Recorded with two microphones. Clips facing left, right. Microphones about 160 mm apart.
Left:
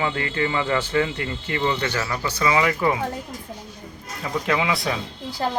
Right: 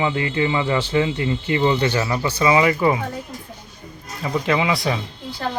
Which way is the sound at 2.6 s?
5° right (ahead or behind).